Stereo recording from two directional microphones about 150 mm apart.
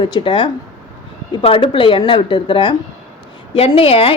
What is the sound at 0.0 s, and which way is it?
A woman's voice, 30° left (ahead or behind).